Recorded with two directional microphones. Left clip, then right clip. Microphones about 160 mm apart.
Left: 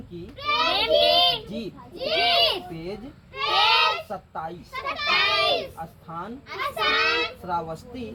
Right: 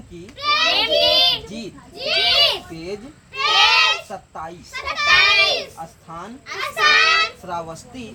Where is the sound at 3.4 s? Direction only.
25° right (ahead or behind).